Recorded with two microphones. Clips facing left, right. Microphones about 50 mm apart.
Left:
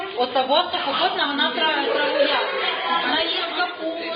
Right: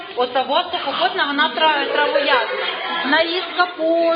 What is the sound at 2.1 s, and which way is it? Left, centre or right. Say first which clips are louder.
Speech: right 4 dB; right.